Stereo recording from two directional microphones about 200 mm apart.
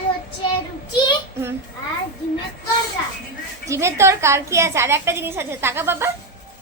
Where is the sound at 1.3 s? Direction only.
10° right (ahead or behind).